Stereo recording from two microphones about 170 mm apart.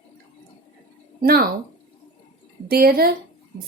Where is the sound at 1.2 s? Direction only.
65° right (ahead or behind).